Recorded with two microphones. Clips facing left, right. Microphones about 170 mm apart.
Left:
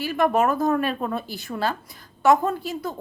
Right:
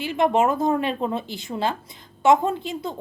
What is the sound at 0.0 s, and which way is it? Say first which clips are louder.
A woman's voice: right 1 dB; 20° right (ahead or behind).